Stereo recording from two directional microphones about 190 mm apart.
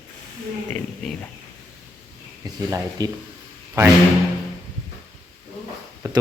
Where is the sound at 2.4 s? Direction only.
20° right (ahead or behind).